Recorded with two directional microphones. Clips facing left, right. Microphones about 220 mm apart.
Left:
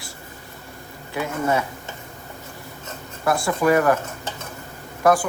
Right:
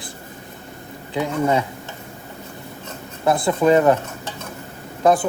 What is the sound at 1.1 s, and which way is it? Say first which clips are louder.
Speech: right 3 dB; 20° right (ahead or behind).